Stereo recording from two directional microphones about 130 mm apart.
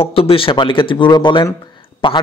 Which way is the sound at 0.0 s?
45° left (ahead or behind).